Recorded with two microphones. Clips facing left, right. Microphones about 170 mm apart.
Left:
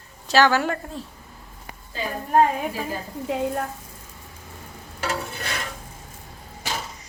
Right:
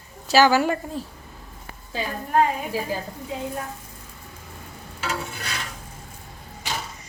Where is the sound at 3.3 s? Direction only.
70° left (ahead or behind).